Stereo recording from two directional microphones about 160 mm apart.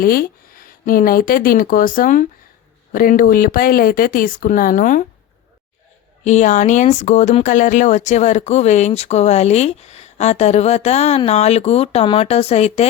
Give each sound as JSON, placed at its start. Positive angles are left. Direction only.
{"t": 0.0, "sound": "speech", "side_deg": 65}
{"t": 6.2, "sound": "speech", "side_deg": 50}